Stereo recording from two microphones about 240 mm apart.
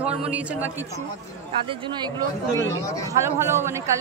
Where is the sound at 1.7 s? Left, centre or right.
Centre.